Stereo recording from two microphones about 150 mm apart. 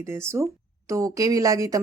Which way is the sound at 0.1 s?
20° right (ahead or behind).